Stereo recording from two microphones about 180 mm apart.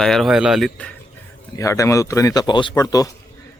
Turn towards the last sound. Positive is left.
turn(degrees=20)  # may be behind; listen again after turning